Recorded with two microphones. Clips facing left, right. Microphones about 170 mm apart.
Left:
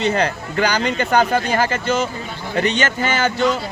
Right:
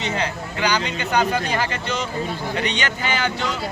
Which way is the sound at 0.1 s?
55° left (ahead or behind).